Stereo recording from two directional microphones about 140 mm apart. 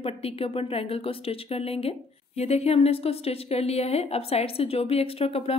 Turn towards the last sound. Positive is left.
turn(degrees=45)  # may be behind; listen again after turning